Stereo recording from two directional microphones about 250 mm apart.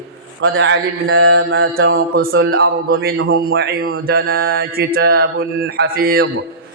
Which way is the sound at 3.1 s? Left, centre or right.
Right.